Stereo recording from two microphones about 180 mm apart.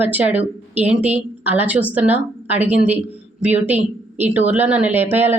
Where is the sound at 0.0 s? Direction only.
10° right (ahead or behind).